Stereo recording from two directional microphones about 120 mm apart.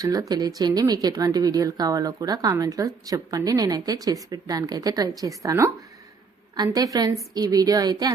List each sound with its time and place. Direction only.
0.0 s speech: 30° right (ahead or behind)
6.7 s speech: 30° right (ahead or behind)